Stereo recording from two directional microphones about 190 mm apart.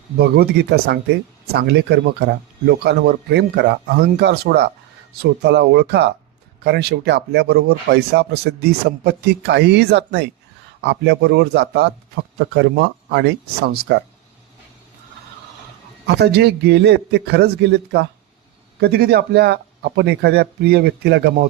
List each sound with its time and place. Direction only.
0.2 s speech: 60° right (ahead or behind)
16.0 s speech: 60° right (ahead or behind)